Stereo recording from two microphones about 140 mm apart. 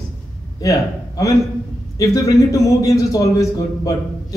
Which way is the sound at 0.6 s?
25° left (ahead or behind).